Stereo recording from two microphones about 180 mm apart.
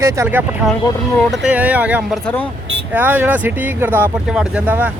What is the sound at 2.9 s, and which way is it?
Speech, 10° right (ahead or behind).